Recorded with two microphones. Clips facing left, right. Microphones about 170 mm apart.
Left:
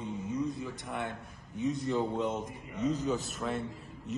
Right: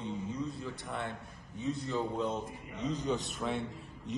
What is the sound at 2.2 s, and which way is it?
Speech, 20° left (ahead or behind).